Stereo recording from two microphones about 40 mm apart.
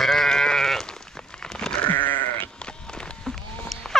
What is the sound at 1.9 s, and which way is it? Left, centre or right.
Sheep, left.